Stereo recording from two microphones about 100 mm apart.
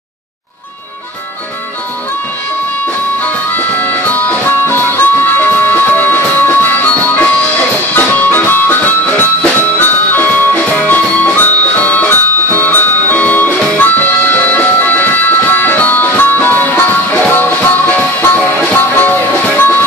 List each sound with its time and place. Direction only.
3.5 s harmonica: 20° left (ahead or behind)
7.9 s music: 15° left (ahead or behind)